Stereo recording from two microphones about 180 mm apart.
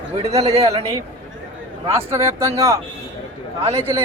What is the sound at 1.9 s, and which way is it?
Speech, 15° right (ahead or behind).